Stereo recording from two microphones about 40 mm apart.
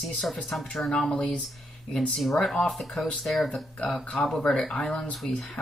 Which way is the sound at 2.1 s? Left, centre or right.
Centre.